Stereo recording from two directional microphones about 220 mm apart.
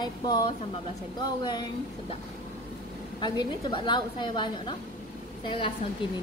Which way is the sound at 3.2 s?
20° left (ahead or behind).